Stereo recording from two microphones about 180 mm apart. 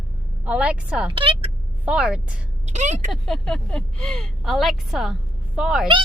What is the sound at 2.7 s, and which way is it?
Speech, 40° right (ahead or behind).